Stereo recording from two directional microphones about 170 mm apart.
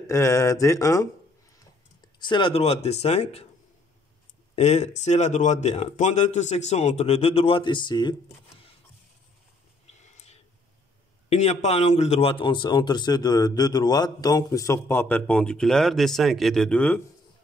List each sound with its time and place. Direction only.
0.0 s speech: 15° left (ahead or behind)
2.1 s speech: 30° left (ahead or behind)
4.6 s speech: 40° left (ahead or behind)
10.1 s a sound: 40° left (ahead or behind)
11.2 s speech: 40° left (ahead or behind); by 17.0 s 10° left (ahead or behind)